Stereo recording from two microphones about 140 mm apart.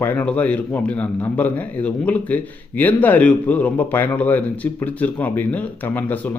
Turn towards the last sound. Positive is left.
turn(degrees=15)  # may be behind; listen again after turning